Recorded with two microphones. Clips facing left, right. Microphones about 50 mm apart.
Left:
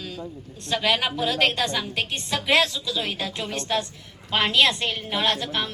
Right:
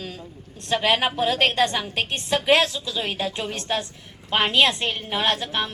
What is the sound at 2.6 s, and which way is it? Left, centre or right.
A woman's voice, right.